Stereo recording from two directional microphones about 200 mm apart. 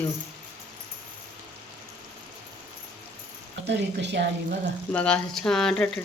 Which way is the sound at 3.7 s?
60° right (ahead or behind).